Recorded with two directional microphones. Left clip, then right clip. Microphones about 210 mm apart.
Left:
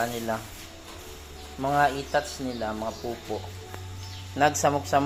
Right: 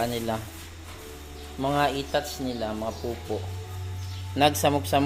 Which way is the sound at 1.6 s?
15° right (ahead or behind).